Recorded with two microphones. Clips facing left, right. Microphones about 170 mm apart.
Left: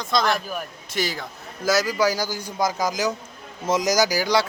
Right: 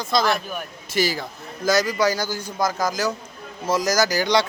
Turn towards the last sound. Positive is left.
turn(degrees=5)  # may be behind; listen again after turning